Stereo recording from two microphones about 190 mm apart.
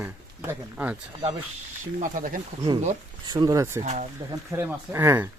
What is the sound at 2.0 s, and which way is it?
Speech, 45° right (ahead or behind).